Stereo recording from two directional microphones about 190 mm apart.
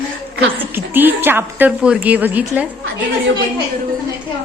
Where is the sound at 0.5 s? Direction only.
10° right (ahead or behind).